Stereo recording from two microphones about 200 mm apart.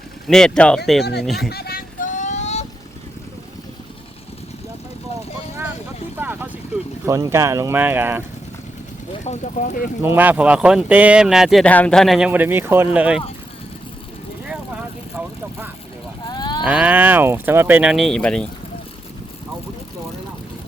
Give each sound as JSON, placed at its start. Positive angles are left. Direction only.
{"t": 0.3, "sound": "speech", "side_deg": 5}
{"t": 1.5, "sound": "vehicle", "side_deg": 50}
{"t": 6.1, "sound": "vehicle", "side_deg": -10}
{"t": 7.0, "sound": "speech", "side_deg": -15}
{"t": 9.2, "sound": "speech", "side_deg": 35}
{"t": 10.0, "sound": "speech", "side_deg": -10}
{"t": 16.2, "sound": "cattle", "side_deg": 20}
{"t": 16.6, "sound": "speech", "side_deg": -5}